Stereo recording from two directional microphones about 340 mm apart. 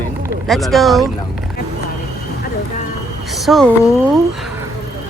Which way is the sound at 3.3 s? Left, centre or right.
Centre.